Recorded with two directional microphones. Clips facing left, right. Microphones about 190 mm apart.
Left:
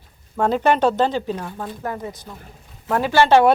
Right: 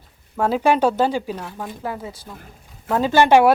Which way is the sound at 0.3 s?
5° right (ahead or behind).